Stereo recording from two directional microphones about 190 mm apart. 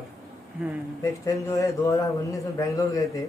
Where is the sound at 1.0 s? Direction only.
15° left (ahead or behind).